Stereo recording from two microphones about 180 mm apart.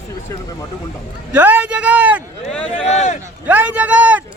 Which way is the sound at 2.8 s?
40° left (ahead or behind).